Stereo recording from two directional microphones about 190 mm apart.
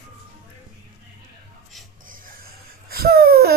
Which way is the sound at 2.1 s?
45° right (ahead or behind).